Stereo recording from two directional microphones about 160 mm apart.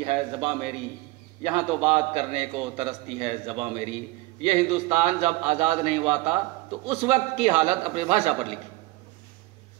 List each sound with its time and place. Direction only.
0.0 s a man's voice: 35° right (ahead or behind)